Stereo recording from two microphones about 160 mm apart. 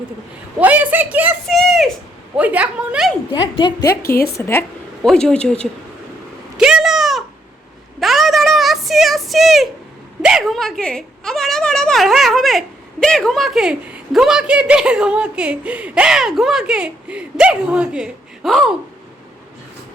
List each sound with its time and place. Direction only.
0.6 s a woman's voice: 10° right (ahead or behind)
1.5 s speech: centre (ahead or behind)
2.3 s a woman's voice: 10° right (ahead or behind)
3.3 s a woman's voice: 30° left (ahead or behind)
4.0 s a woman's voice: 70° left (ahead or behind)
4.4 s a woman's voice: 15° left (ahead or behind)
5.0 s speech: 5° left (ahead or behind)
6.6 s a sound: 5° right (ahead or behind)
10.2 s a woman's voice: centre (ahead or behind)